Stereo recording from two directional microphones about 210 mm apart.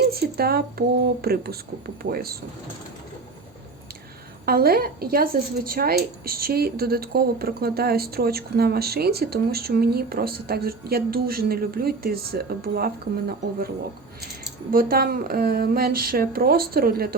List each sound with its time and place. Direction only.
0.1 s a woman's voice: 45° right (ahead or behind)
4.4 s a woman's voice: 45° right (ahead or behind)
14.7 s a woman's voice: 45° right (ahead or behind)